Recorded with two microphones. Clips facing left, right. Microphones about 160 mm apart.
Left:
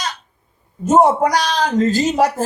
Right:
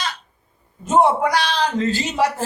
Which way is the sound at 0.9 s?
40° left (ahead or behind).